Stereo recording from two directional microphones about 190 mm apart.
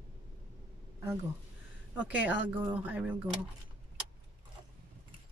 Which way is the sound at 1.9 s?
10° right (ahead or behind).